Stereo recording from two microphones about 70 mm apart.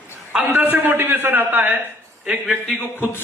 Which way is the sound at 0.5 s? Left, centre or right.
Right.